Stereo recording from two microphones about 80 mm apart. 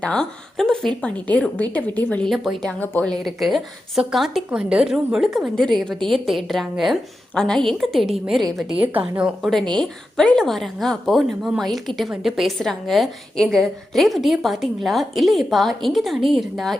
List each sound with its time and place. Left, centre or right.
0.0 s a woman's voice: centre
1.3 s a woman's voice: centre
2.2 s a woman's voice: centre
5.5 s a woman's voice: centre
7.3 s a woman's voice: centre
8.7 s a woman's voice: centre
9.2 s a woman's voice: centre